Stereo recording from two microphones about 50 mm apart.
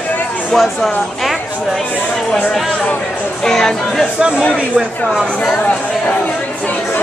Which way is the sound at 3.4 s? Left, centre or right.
Centre.